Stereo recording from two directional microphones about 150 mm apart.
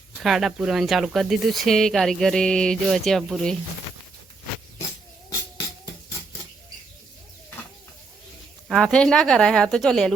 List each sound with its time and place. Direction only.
0.2 s speech: centre (ahead or behind)
5.3 s music: 25° left (ahead or behind)
8.6 s speech: centre (ahead or behind)